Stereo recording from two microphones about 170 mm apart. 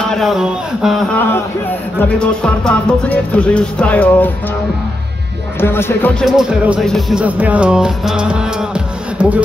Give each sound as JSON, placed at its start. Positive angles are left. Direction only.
{"t": 0.1, "sound": "music", "side_deg": 0}
{"t": 5.6, "sound": "music", "side_deg": 15}
{"t": 6.2, "sound": "music", "side_deg": -5}